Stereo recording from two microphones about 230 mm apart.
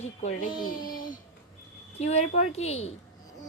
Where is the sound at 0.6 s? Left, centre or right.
Left.